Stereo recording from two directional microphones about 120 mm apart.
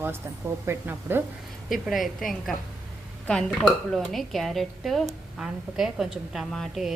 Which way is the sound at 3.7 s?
Centre (ahead or behind).